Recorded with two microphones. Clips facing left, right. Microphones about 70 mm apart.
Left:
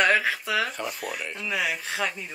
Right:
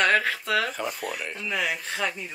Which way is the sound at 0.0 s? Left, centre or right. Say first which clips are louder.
Even; centre.